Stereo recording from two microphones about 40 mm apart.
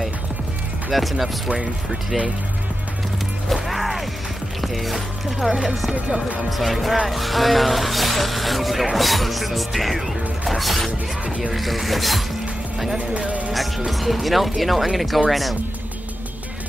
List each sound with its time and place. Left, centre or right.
0.9 s speech: centre
3.6 s mechanisms: centre
4.6 s speech: centre
6.0 s speech: right
6.5 s speech: centre
13.5 s speech: centre